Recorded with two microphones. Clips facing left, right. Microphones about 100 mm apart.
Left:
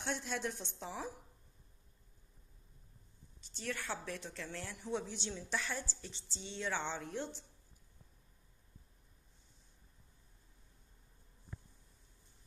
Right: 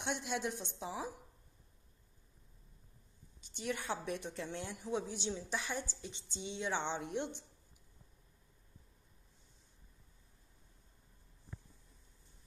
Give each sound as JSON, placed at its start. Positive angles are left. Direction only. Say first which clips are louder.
{"t": 0.0, "sound": "a woman's voice", "louder": "right 1 dB", "side_deg": -15}
{"t": 3.5, "sound": "a woman's voice", "louder": "right 3 dB", "side_deg": -15}